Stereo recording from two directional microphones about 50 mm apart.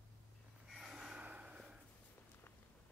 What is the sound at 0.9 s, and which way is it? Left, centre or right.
Snort, centre.